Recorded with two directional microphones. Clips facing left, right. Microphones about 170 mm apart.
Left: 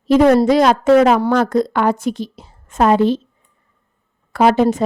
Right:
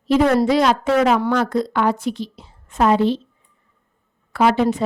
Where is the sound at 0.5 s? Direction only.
45° left (ahead or behind).